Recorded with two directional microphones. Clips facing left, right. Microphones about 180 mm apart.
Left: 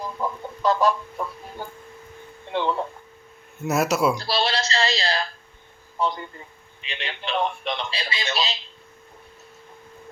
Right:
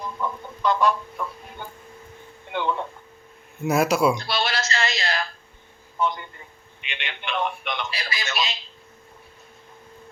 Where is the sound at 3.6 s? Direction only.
Centre (ahead or behind).